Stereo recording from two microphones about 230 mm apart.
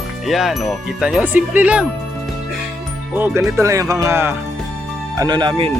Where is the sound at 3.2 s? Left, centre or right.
Centre.